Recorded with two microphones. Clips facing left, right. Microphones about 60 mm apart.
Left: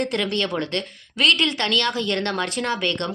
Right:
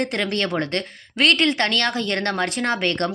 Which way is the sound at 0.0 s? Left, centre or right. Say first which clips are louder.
Even; right.